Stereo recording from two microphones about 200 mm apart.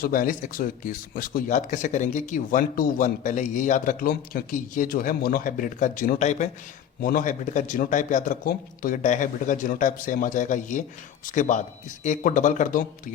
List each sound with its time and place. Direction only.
0.0 s a man's voice: 45° left (ahead or behind)